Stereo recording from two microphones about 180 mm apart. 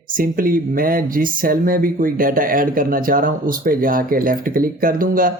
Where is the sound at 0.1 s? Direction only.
50° right (ahead or behind).